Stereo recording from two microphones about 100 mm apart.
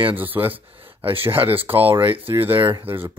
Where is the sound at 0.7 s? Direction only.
65° right (ahead or behind).